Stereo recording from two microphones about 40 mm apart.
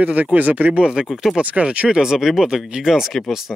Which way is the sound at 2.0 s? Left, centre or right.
Centre.